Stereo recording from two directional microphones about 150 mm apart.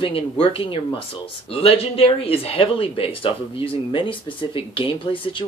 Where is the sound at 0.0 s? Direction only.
35° left (ahead or behind).